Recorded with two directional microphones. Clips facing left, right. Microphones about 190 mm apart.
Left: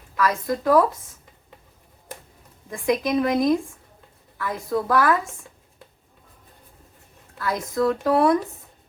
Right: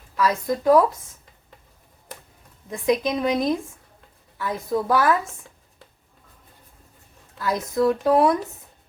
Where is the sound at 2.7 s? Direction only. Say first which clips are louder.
Right 1 dB; 20° right (ahead or behind).